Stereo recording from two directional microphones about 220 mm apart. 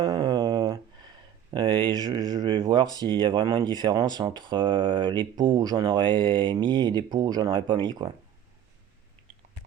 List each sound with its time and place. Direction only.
0.0 s speech: 20° right (ahead or behind)